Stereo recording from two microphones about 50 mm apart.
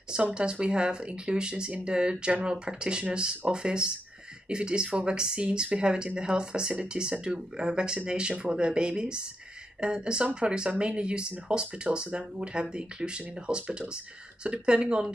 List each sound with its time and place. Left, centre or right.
0.1 s speech: centre